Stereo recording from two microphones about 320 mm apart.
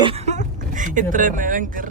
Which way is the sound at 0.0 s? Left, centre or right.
Centre.